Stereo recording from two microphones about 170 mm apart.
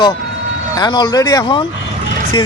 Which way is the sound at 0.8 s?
25° left (ahead or behind).